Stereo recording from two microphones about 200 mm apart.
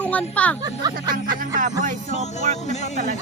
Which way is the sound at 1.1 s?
40° right (ahead or behind).